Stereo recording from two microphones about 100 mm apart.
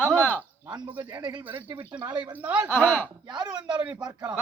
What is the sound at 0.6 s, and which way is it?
Speech, 50° right (ahead or behind).